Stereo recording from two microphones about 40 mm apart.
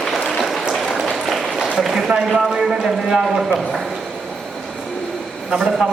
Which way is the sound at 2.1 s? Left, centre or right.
Centre.